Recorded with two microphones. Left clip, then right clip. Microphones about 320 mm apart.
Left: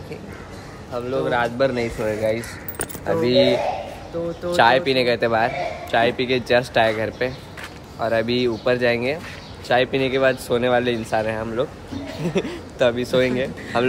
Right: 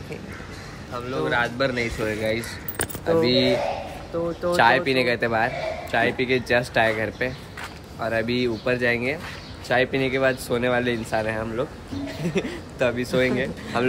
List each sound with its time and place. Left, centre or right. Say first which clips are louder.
0.9 s speech: left 3 dB; centre
4.1 s speech: even; centre
4.5 s a man's voice: left 2 dB; centre